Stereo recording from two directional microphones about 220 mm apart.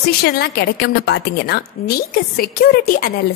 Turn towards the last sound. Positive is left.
turn(degrees=45)  # may be behind; listen again after turning